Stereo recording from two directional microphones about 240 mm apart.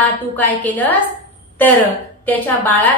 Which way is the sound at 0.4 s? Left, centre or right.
Centre.